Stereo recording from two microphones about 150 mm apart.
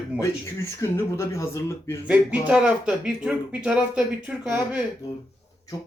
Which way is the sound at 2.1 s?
5° right (ahead or behind).